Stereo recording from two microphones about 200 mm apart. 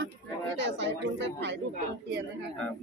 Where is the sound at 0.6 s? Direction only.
60° right (ahead or behind).